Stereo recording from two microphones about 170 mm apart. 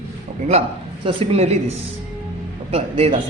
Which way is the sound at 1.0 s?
35° right (ahead or behind).